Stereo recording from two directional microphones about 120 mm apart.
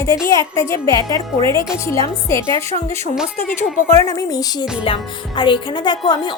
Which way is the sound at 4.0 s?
30° left (ahead or behind).